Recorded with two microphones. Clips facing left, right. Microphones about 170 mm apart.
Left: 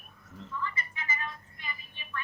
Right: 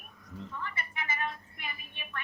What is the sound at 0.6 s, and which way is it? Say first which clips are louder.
Music: left 2 dB; 60° right (ahead or behind).